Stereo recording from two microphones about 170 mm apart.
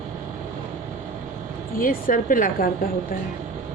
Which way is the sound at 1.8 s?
55° left (ahead or behind).